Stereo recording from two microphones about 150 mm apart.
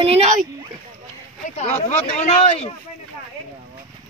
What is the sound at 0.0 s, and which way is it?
Speech, 45° right (ahead or behind).